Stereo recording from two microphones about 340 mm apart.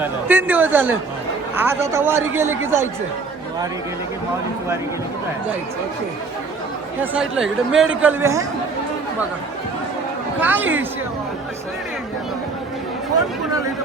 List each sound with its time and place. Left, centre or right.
0.0 s speech: centre
7.0 s speech: centre
10.4 s speech: centre